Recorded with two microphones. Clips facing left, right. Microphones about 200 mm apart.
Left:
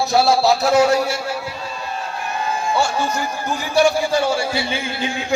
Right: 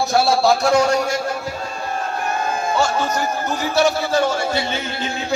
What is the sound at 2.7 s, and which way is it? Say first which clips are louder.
A man's voice: right 1 dB; 10° left (ahead or behind).